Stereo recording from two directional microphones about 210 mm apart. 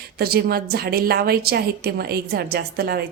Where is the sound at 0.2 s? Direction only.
45° right (ahead or behind).